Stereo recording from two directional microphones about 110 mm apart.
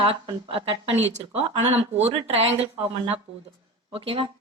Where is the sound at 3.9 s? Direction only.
55° right (ahead or behind).